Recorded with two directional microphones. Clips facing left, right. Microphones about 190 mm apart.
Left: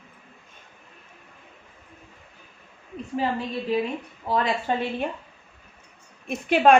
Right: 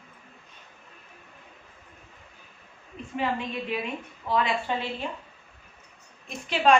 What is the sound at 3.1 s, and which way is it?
A woman's voice, 35° left (ahead or behind).